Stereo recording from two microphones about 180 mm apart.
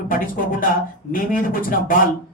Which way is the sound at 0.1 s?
50° left (ahead or behind).